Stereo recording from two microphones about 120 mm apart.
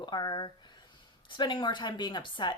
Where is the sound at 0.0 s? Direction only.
40° left (ahead or behind).